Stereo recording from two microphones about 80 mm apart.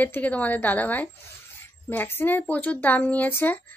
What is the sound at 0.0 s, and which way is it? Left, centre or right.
Speech, left.